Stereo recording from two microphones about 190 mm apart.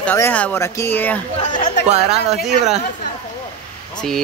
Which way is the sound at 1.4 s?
40° left (ahead or behind).